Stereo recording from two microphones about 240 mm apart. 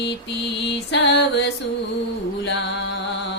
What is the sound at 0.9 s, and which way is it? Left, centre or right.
Music, left.